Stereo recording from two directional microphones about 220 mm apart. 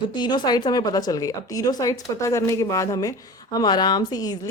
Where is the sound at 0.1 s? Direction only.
20° left (ahead or behind).